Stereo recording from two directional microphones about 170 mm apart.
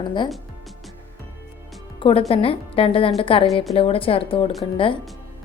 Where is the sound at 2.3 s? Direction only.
35° left (ahead or behind).